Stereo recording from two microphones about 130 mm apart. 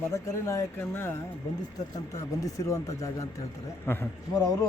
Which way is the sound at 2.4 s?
25° left (ahead or behind).